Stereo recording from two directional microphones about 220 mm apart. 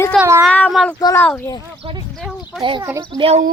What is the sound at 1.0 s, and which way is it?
Speech, 15° left (ahead or behind).